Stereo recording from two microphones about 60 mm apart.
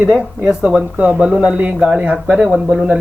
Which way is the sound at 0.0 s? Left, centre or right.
Centre.